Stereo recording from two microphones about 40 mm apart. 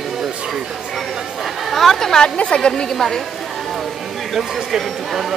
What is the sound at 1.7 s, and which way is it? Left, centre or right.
Speech, centre.